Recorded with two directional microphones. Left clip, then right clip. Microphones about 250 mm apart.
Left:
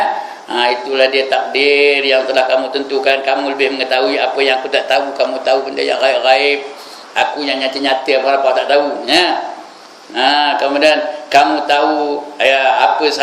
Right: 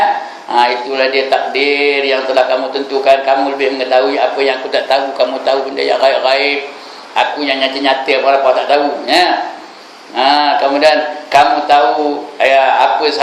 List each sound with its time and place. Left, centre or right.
0.5 s speech: left